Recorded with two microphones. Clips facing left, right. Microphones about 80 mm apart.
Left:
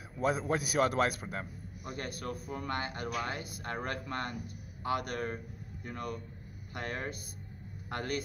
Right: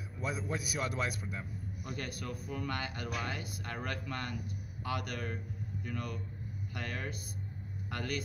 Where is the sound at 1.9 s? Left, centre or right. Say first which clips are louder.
Left 3 dB; left.